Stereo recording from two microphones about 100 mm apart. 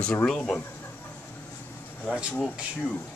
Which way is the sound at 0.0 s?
10° left (ahead or behind).